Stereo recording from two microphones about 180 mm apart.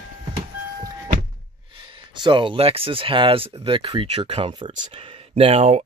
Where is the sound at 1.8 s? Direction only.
25° right (ahead or behind).